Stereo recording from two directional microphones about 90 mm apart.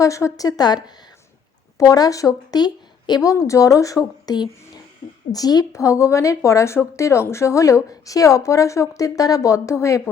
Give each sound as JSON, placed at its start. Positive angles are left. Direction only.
{"t": 0.0, "sound": "speech", "side_deg": 35}
{"t": 1.8, "sound": "a woman's voice", "side_deg": 40}